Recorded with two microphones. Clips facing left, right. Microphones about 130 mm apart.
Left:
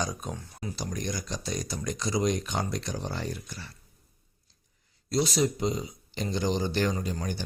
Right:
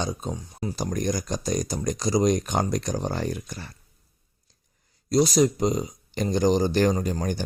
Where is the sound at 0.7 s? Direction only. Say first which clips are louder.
Right 7 dB; 45° right (ahead or behind).